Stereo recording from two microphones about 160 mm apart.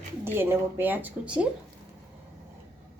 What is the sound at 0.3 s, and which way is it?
A woman's voice, 15° right (ahead or behind).